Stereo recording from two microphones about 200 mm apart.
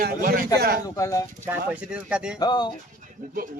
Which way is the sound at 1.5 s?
5° right (ahead or behind).